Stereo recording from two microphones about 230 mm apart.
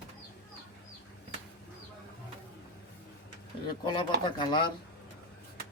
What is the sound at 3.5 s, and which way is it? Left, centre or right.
Speech, left.